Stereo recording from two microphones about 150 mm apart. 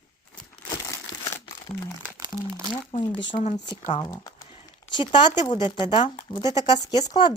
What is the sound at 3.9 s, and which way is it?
Speech, 30° left (ahead or behind).